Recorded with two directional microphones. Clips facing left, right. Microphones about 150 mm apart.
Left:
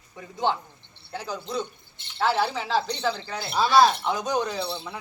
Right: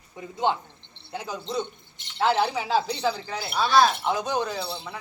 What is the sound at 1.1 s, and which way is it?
Speech, 20° right (ahead or behind).